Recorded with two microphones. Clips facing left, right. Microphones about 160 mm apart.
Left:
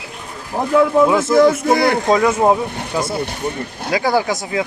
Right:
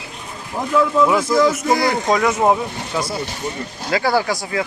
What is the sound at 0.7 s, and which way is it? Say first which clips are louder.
Speech: left 3 dB; 55° left (ahead or behind).